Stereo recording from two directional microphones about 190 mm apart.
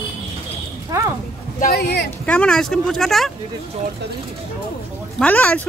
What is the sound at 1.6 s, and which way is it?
Speech, 55° left (ahead or behind).